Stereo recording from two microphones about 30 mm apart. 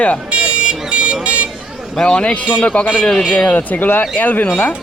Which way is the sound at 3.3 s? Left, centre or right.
Left.